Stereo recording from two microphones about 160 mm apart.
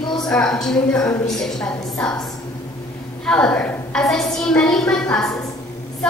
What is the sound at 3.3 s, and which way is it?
A woman's voice, 5° left (ahead or behind).